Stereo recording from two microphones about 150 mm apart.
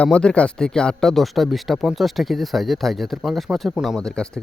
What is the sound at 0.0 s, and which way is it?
Speech, 5° left (ahead or behind).